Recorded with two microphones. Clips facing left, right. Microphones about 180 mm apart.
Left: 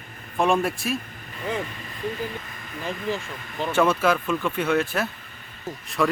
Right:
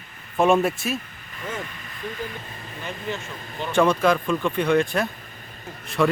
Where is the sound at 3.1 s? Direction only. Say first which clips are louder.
Left 3 dB; 30° left (ahead or behind).